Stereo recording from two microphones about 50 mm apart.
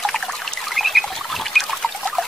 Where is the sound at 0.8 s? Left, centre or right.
Centre.